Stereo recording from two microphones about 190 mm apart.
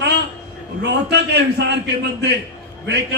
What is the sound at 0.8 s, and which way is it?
A man's voice, 60° right (ahead or behind).